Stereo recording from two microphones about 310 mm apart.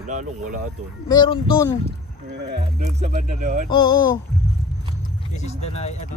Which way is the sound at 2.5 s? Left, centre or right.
Right.